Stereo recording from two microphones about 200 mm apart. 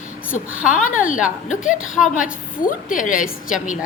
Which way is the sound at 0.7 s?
40° left (ahead or behind).